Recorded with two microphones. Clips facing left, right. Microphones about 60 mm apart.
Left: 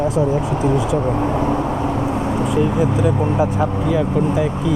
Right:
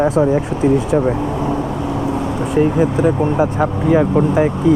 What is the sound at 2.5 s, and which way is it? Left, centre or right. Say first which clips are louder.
Speech: right 5 dB; right.